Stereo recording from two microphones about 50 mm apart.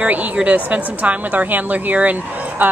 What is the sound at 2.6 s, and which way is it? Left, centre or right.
Speech, right.